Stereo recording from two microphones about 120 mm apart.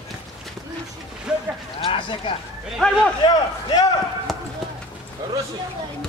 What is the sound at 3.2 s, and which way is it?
Speech, 30° left (ahead or behind).